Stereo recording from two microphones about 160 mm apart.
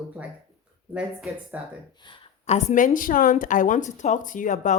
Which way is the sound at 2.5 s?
50° left (ahead or behind).